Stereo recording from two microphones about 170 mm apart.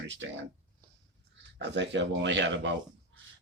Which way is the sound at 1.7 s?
90° right.